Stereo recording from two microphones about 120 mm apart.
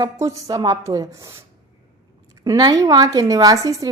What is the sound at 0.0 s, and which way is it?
A woman's voice, 30° right (ahead or behind).